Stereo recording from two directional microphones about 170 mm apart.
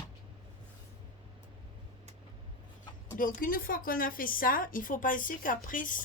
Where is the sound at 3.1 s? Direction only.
55° left (ahead or behind).